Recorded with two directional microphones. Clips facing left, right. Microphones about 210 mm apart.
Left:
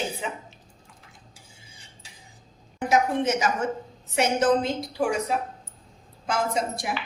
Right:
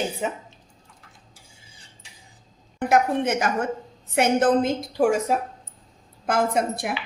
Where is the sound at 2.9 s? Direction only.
55° right (ahead or behind).